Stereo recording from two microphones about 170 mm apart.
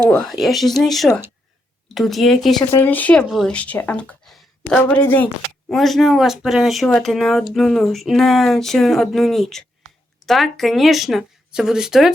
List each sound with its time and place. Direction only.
0.2 s speech: centre (ahead or behind)